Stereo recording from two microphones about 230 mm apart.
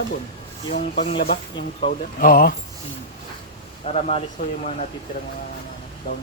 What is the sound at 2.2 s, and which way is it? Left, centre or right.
Speech, left.